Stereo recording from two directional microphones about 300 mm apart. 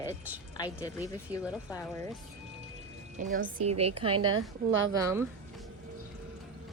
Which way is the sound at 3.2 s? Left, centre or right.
Right.